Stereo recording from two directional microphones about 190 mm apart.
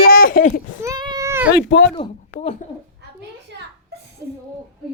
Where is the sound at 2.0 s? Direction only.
35° left (ahead or behind).